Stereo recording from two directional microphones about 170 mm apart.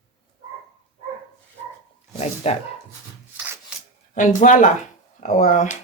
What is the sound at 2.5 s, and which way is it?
Speech, 40° left (ahead or behind).